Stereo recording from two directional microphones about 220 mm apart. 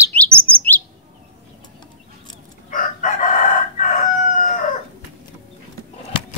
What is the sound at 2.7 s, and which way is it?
Chicken, 35° left (ahead or behind).